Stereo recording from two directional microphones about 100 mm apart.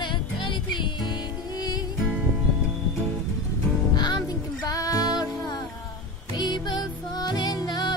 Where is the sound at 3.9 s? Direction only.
45° left (ahead or behind).